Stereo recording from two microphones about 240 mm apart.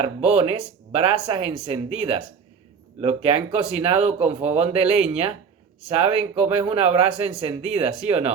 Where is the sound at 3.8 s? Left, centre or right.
Right.